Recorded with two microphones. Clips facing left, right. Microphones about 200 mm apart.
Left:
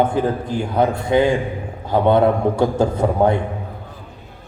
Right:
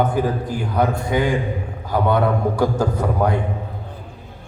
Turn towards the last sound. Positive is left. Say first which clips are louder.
# left 4 dB
turn(degrees=25)  # may be behind; listen again after turning